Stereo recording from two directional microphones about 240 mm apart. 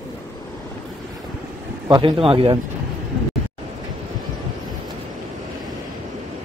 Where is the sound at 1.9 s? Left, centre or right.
Right.